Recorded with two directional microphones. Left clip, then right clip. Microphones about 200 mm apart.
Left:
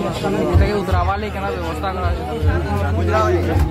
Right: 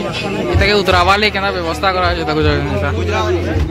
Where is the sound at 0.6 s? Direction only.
10° right (ahead or behind).